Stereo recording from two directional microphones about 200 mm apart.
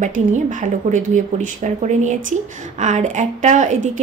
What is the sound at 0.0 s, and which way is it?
A woman's voice, 40° right (ahead or behind).